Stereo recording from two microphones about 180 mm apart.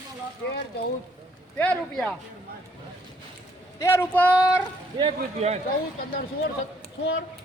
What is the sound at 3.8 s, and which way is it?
Speech, 15° left (ahead or behind).